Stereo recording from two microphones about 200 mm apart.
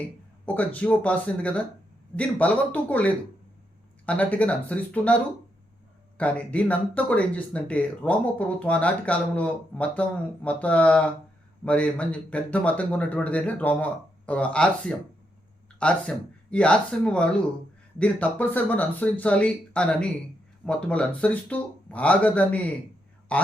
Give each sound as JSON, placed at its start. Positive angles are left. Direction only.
{"t": 0.4, "sound": "speech", "side_deg": 10}
{"t": 6.1, "sound": "a man's voice", "side_deg": 5}